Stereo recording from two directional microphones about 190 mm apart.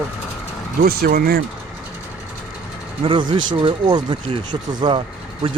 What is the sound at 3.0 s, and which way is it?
Speech, 25° right (ahead or behind).